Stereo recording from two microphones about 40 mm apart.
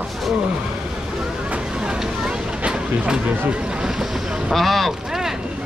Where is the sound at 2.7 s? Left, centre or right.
Right.